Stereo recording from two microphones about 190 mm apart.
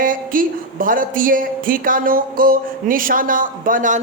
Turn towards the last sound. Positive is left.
turn(degrees=-45)  # may be behind; listen again after turning